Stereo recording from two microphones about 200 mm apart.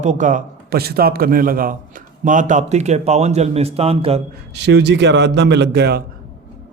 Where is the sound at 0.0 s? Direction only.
40° right (ahead or behind).